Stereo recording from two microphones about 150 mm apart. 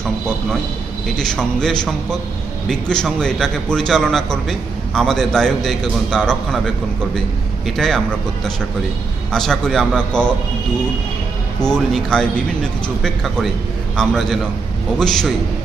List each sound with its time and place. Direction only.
1.0 s a man's voice: 5° left (ahead or behind)
7.8 s a man's voice: centre (ahead or behind)
9.3 s a man's voice: 5° left (ahead or behind)
11.6 s a man's voice: 5° left (ahead or behind)